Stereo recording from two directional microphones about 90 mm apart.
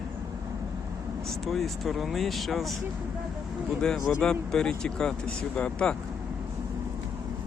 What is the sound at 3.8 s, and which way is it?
Speech, 5° left (ahead or behind).